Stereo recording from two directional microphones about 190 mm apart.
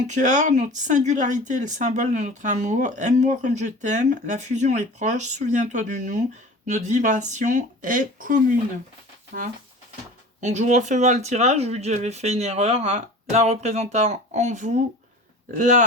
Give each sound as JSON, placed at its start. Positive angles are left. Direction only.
{"t": 0.1, "sound": "speech", "side_deg": -40}
{"t": 10.4, "sound": "speech", "side_deg": -40}